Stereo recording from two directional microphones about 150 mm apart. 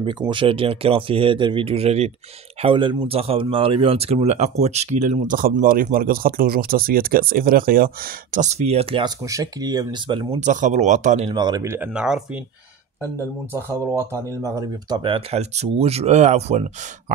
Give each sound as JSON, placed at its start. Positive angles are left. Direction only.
{"t": 0.0, "sound": "speech", "side_deg": -30}
{"t": 2.6, "sound": "speech", "side_deg": -35}
{"t": 9.0, "sound": "speech", "side_deg": -20}
{"t": 10.4, "sound": "speech", "side_deg": -55}
{"t": 11.2, "sound": "speech", "side_deg": -30}
{"t": 11.6, "sound": "speech", "side_deg": -15}
{"t": 13.7, "sound": "speech", "side_deg": -20}